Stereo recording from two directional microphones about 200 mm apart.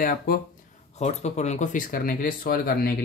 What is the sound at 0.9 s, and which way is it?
Speech, 35° left (ahead or behind).